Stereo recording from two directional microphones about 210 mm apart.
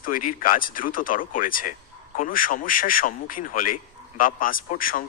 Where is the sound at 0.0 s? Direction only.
40° left (ahead or behind).